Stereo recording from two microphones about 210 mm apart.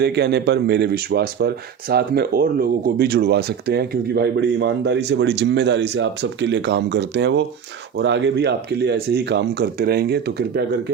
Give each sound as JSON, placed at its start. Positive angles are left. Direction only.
{"t": 0.0, "sound": "speech", "side_deg": -50}